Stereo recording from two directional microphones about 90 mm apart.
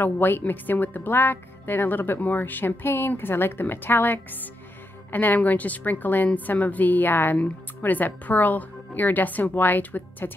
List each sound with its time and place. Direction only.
0.0 s a woman's voice: 25° left (ahead or behind)